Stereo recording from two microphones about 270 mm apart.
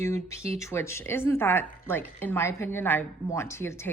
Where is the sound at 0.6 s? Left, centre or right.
Centre.